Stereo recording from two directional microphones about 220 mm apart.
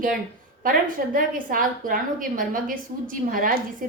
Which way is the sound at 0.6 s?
40° right (ahead or behind).